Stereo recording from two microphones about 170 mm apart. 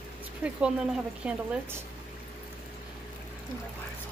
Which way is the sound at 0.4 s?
5° right (ahead or behind).